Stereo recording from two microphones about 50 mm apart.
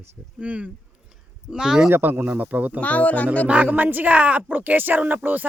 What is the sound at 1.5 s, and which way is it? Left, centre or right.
Speech, centre.